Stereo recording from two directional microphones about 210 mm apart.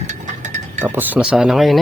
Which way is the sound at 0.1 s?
35° right (ahead or behind).